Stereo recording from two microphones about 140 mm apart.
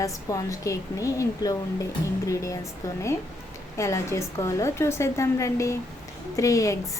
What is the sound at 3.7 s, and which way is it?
A woman's voice, 20° left (ahead or behind).